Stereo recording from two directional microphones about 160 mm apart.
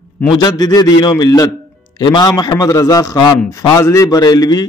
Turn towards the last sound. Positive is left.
turn(degrees=25)  # may be behind; listen again after turning